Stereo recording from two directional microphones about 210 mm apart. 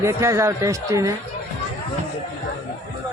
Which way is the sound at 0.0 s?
15° right (ahead or behind).